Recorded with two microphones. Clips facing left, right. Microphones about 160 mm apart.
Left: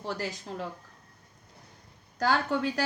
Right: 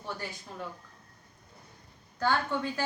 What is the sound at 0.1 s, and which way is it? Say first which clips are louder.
Speech: left 5 dB; 90° left.